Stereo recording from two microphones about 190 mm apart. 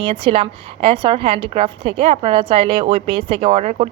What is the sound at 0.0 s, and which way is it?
A woman's voice, 30° right (ahead or behind).